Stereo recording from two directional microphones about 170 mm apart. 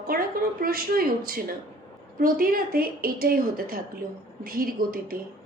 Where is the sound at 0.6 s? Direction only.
60° right (ahead or behind).